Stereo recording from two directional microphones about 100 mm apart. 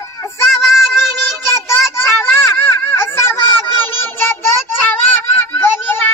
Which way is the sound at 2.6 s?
25° left (ahead or behind).